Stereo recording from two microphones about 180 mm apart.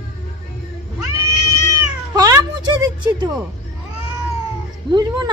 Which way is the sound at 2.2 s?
20° right (ahead or behind).